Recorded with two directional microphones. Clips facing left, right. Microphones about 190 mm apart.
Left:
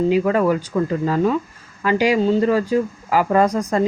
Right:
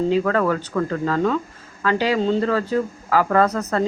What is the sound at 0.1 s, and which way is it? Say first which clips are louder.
Speech: left 2 dB; 15° left (ahead or behind).